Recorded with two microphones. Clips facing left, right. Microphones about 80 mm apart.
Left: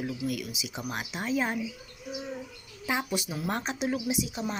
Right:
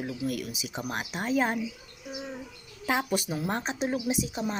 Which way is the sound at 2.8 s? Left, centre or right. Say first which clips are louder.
Right 3 dB; right.